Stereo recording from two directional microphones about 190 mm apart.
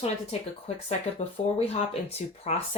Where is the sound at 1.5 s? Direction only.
30° left (ahead or behind).